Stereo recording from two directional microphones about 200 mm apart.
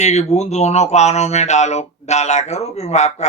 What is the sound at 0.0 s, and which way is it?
Speech, 35° left (ahead or behind).